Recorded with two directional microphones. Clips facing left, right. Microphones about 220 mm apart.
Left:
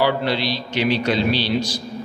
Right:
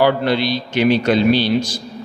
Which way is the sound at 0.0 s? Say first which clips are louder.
Right 4 dB; 50° right (ahead or behind).